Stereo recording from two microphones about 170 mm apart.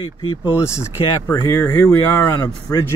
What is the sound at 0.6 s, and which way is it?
Speech, 15° left (ahead or behind).